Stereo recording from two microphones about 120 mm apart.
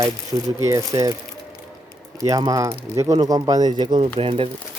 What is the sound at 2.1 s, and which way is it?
Speech, 30° right (ahead or behind).